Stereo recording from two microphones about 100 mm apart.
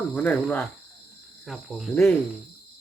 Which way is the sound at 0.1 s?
15° left (ahead or behind).